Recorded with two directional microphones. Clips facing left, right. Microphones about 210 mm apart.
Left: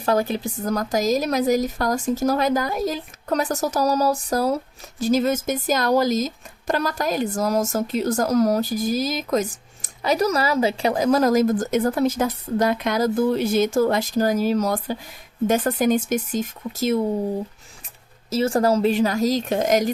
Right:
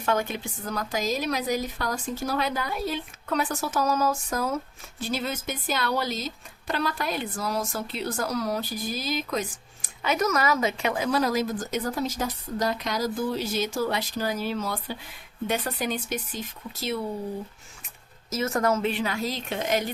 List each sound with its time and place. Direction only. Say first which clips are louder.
0.0 s speech: left 6 dB; 35° left (ahead or behind)
18.3 s speech: left 6 dB; 30° left (ahead or behind)